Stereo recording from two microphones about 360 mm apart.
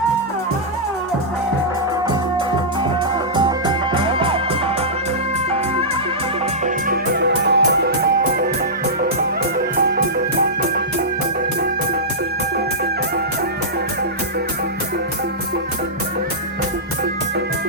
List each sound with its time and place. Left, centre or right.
3.3 s music: centre
6.8 s music: right